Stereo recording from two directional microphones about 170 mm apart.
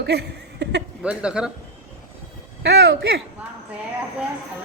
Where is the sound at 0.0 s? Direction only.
75° right (ahead or behind).